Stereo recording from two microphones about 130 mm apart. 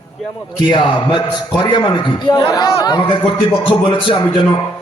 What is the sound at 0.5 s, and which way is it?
A man's voice, 35° left (ahead or behind).